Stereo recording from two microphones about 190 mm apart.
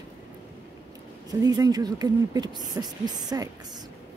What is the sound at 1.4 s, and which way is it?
Speech, 20° right (ahead or behind).